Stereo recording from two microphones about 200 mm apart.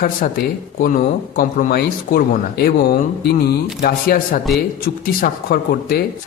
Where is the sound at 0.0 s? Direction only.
45° left (ahead or behind).